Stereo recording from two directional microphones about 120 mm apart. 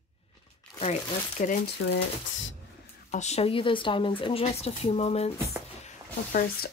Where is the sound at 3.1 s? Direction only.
65° left (ahead or behind).